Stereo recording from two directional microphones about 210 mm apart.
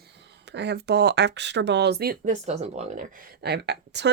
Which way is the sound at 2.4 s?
30° right (ahead or behind).